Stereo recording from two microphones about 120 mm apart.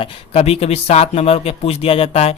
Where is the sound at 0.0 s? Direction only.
60° left (ahead or behind).